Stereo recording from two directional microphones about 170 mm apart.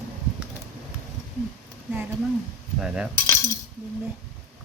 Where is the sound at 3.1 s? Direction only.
15° left (ahead or behind).